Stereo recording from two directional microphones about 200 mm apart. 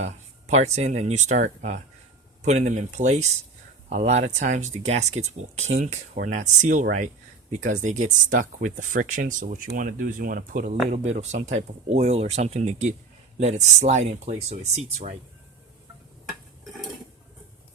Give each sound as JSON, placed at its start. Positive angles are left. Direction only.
{"t": 0.0, "sound": "speech", "side_deg": -35}